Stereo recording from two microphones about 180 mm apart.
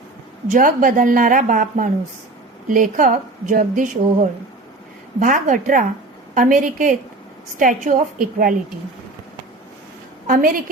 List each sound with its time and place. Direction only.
0.5 s a woman's voice: 50° right (ahead or behind)
10.2 s a woman's voice: 50° right (ahead or behind)